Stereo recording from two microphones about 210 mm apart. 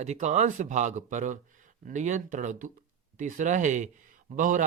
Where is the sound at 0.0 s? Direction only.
35° right (ahead or behind).